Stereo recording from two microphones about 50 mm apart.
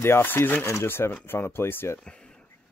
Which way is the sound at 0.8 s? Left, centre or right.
Left.